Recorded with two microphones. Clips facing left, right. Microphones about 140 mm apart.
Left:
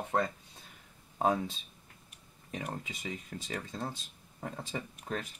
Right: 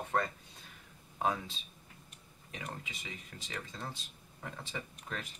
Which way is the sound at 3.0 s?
40° left (ahead or behind).